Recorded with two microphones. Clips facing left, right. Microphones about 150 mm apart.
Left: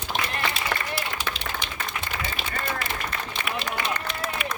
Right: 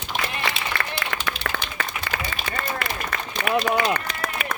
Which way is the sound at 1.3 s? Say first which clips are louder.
Right 3 dB; 70° right (ahead or behind).